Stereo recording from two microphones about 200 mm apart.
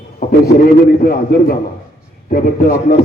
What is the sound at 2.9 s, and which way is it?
Speech, 50° left (ahead or behind).